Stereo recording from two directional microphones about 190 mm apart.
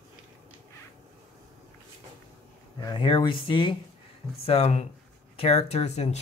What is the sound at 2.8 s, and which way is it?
Speech, 25° left (ahead or behind).